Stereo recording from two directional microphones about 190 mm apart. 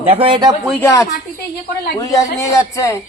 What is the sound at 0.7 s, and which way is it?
Speech, 10° left (ahead or behind).